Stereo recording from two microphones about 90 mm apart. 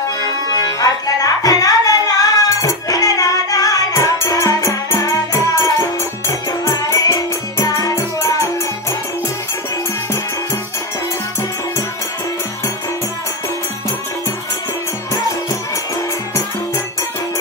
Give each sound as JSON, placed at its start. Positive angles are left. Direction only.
{"t": 0.2, "sound": "music", "side_deg": 40}